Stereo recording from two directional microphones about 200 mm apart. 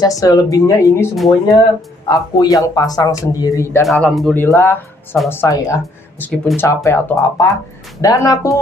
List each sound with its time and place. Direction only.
0.0 s speech: 20° left (ahead or behind)
1.1 s speech: centre (ahead or behind)
2.0 s speech: 20° left (ahead or behind)
3.8 s speech: centre (ahead or behind)